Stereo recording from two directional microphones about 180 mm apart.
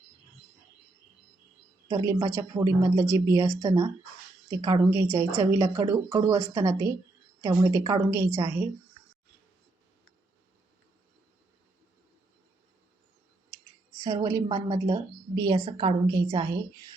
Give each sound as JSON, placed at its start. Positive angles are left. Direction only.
{"t": 1.9, "sound": "a woman's voice", "side_deg": -20}
{"t": 14.0, "sound": "a woman's voice", "side_deg": -20}